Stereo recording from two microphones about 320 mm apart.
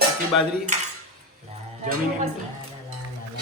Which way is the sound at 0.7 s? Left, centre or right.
Right.